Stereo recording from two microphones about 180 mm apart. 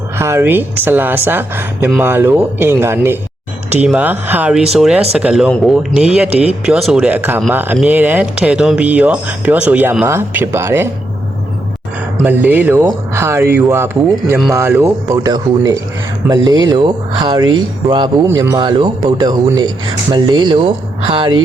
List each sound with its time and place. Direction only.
0.2 s speech: 15° right (ahead or behind)
12.2 s speech: 10° right (ahead or behind); by 21.3 s 30° right (ahead or behind)